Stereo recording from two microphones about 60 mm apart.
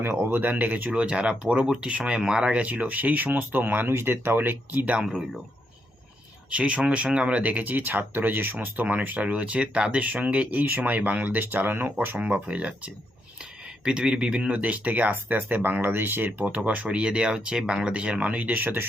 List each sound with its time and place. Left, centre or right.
0.0 s speech: right
6.5 s speech: right
16.6 s speech: right